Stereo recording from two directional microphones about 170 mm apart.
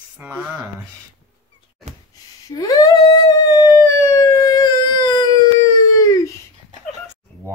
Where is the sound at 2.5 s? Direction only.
20° left (ahead or behind).